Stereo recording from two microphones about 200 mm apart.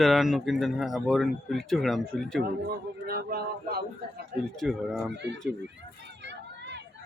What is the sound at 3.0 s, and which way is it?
Speech, 50° right (ahead or behind).